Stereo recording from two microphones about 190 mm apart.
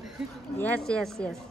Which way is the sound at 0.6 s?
5° left (ahead or behind).